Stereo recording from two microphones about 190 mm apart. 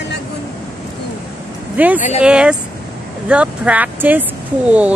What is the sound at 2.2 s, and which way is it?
Speech, 5° right (ahead or behind).